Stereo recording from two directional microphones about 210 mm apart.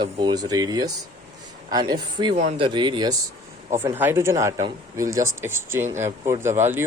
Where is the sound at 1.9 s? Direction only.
20° right (ahead or behind).